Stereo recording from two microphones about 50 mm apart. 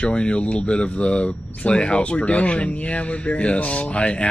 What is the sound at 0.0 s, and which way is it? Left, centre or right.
Speech, left.